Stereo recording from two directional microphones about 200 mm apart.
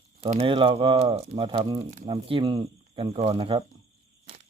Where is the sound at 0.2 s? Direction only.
35° right (ahead or behind).